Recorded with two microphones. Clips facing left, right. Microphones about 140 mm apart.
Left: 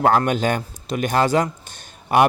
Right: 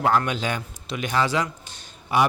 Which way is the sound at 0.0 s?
50° left (ahead or behind).